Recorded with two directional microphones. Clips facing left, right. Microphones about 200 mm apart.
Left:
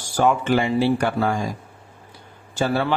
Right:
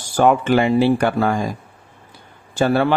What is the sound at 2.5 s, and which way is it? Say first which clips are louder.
Speech: right 5 dB; 55° right (ahead or behind).